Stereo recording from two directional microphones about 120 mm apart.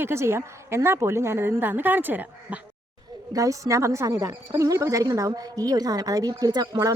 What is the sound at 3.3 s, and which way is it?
Speech, 25° right (ahead or behind).